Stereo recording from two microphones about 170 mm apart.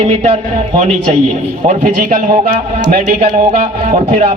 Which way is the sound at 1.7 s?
50° right (ahead or behind).